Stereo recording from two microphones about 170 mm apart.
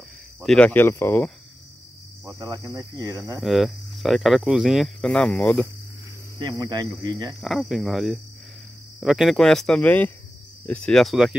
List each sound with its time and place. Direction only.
0.4 s speech: 5° left (ahead or behind)
2.2 s cricket: 20° right (ahead or behind)
3.3 s speech: centre (ahead or behind)
6.3 s cricket: 20° right (ahead or behind)
7.3 s speech: centre (ahead or behind)